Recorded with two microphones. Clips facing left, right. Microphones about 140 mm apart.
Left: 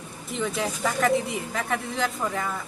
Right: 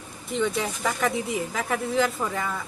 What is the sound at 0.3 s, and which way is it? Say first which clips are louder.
Speech: right 2 dB; centre (ahead or behind).